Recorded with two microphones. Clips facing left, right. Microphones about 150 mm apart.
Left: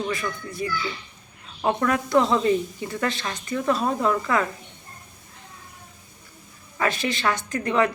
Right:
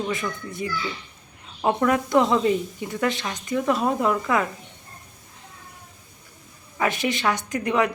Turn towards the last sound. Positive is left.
turn(degrees=-15)  # may be behind; listen again after turning